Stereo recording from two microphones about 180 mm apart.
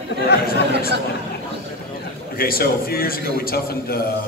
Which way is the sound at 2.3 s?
55° left (ahead or behind).